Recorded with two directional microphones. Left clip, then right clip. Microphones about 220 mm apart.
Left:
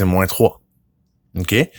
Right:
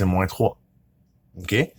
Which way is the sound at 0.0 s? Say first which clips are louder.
Left 6 dB; 45° left (ahead or behind).